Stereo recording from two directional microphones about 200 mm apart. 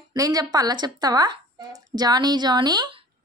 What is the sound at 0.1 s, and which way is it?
A child's voice, 15° right (ahead or behind).